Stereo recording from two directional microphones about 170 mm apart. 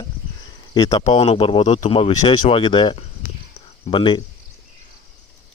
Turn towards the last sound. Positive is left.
turn(degrees=30)  # may be behind; listen again after turning